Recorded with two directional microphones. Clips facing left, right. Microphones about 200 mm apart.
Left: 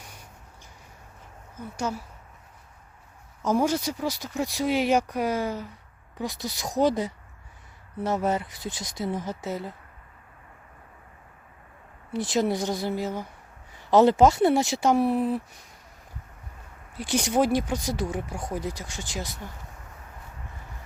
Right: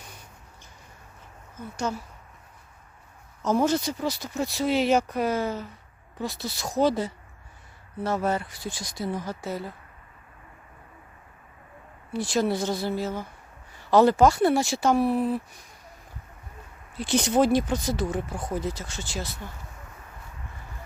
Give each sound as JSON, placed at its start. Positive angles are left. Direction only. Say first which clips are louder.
{"t": 1.5, "sound": "speech", "louder": "even", "side_deg": 10}
{"t": 3.4, "sound": "speech", "louder": "right 1 dB", "side_deg": 10}
{"t": 12.1, "sound": "speech", "louder": "even", "side_deg": 20}
{"t": 16.9, "sound": "speech", "louder": "right 2 dB", "side_deg": 10}